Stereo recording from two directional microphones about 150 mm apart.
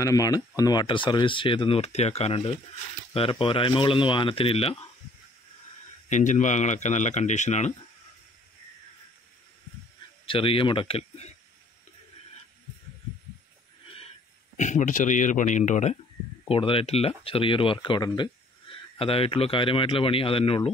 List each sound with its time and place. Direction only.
0.0 s speech: 25° left (ahead or behind); by 4.7 s 40° left (ahead or behind)
6.0 s speech: 55° left (ahead or behind)
10.2 s speech: 35° left (ahead or behind)
14.6 s speech: 55° left (ahead or behind)
16.4 s speech: 35° left (ahead or behind)